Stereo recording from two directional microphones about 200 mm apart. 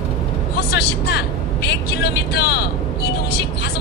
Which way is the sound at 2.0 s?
55° left (ahead or behind).